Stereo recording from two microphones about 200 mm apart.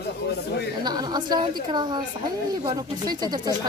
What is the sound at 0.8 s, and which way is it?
A woman's voice, 20° right (ahead or behind).